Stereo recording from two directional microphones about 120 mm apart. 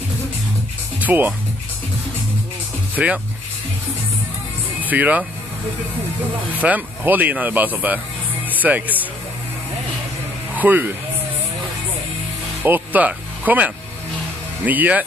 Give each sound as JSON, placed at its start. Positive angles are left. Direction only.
{"t": 1.0, "sound": "speech", "side_deg": -15}
{"t": 3.0, "sound": "speech", "side_deg": -10}
{"t": 4.8, "sound": "speech", "side_deg": -15}
{"t": 6.6, "sound": "speech", "side_deg": -15}
{"t": 10.5, "sound": "speech", "side_deg": -15}
{"t": 12.6, "sound": "speech", "side_deg": -15}